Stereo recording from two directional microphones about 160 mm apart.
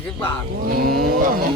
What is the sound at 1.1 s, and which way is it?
Speech, 65° right (ahead or behind).